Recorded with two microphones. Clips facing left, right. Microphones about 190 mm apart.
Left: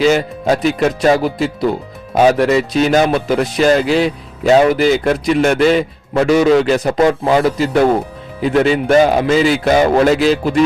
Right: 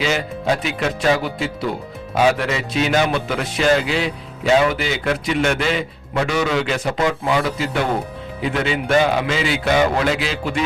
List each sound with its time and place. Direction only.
0.0 s speech: 45° left (ahead or behind)